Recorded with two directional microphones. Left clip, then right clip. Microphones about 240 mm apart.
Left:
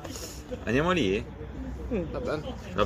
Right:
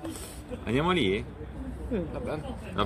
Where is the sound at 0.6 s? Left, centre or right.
Centre.